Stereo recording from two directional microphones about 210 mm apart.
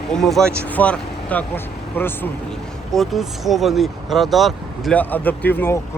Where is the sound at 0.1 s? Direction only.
Centre (ahead or behind).